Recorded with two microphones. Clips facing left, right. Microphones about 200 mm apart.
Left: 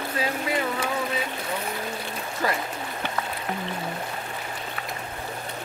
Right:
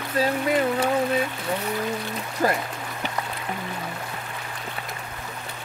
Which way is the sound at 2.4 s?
45° right (ahead or behind).